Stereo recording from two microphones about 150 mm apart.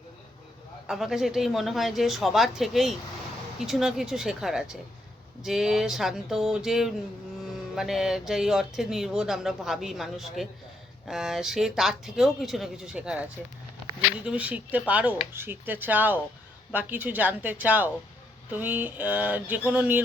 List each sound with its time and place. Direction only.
0.9 s speech: centre (ahead or behind)
14.3 s speech: 10° right (ahead or behind)